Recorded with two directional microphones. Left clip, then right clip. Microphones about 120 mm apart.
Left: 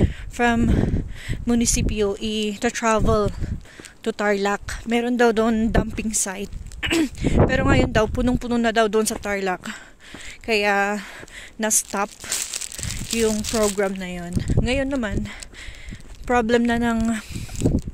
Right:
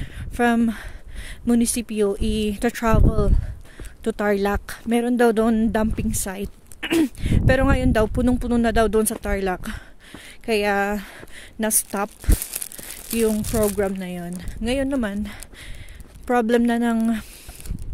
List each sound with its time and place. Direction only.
0.0 s speech: 50° right (ahead or behind)
13.1 s speech: 40° right (ahead or behind)
16.3 s speech: 40° right (ahead or behind)